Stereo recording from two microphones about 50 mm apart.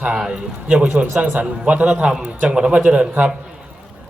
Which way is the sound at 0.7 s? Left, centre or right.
Right.